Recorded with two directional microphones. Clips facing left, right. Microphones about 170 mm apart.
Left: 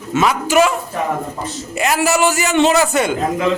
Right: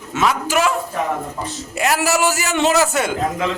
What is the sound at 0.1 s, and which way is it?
Speech, centre (ahead or behind).